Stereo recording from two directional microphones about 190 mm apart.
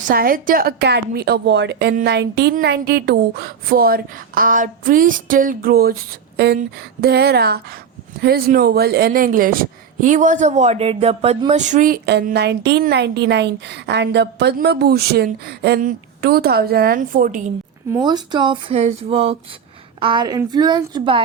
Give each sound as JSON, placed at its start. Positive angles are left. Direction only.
{"t": 0.0, "sound": "a woman's voice", "side_deg": -50}
{"t": 12.0, "sound": "a woman's voice", "side_deg": -60}
{"t": 17.9, "sound": "speech", "side_deg": -20}